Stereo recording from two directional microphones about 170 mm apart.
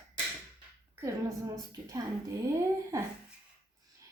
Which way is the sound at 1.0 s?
20° right (ahead or behind).